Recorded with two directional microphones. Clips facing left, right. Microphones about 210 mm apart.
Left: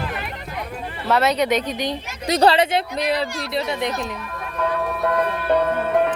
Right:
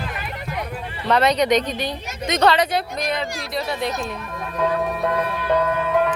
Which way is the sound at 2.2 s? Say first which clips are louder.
Left 2 dB; 35° left (ahead or behind).